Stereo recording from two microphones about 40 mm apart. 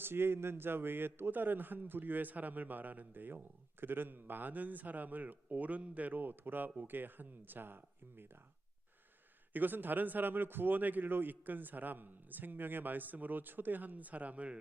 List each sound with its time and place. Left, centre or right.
0.0 s a man's voice: right
1.3 s speech: right
6.1 s speech: right
9.5 s speech: right